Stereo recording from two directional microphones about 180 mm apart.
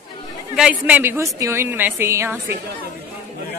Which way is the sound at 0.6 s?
5° right (ahead or behind).